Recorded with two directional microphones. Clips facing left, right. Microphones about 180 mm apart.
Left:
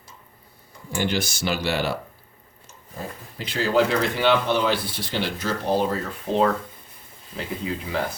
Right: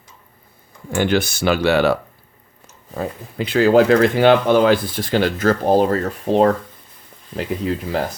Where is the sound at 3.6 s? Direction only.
55° right (ahead or behind).